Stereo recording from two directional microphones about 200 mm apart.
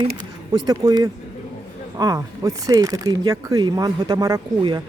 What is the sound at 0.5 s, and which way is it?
Speech, 20° right (ahead or behind).